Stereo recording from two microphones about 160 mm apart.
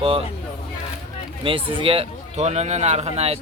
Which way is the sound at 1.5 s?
35° right (ahead or behind).